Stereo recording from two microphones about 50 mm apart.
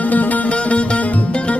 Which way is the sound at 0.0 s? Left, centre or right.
Left.